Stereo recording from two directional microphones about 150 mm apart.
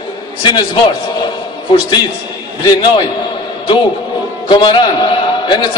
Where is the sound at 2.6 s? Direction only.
30° left (ahead or behind).